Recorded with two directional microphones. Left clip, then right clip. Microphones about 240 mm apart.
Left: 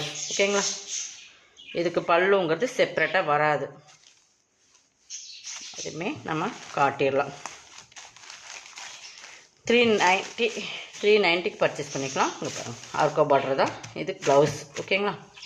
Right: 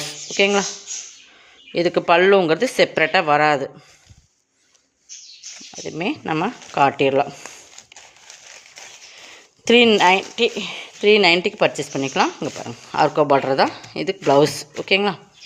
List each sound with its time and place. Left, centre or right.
0.3 s speech: right
1.7 s speech: right
5.8 s speech: right
9.6 s speech: right